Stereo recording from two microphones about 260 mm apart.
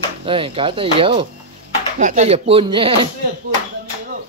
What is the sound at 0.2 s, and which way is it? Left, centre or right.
Speech, centre.